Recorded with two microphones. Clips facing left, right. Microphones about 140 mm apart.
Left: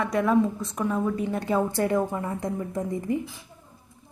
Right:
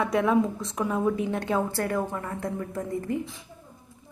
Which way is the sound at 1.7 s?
20° left (ahead or behind).